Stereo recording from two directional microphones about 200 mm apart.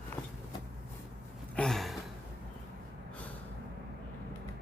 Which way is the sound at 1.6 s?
Centre (ahead or behind).